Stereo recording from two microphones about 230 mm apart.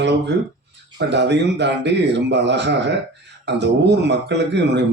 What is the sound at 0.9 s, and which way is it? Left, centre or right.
A man's voice, right.